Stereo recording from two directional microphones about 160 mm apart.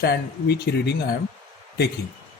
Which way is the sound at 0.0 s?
90° left.